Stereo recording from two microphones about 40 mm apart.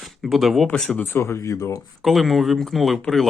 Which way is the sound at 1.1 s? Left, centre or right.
Left.